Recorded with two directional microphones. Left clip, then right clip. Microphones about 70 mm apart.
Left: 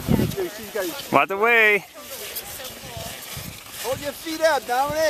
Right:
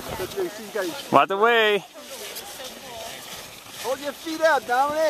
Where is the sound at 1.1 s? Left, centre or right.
Centre.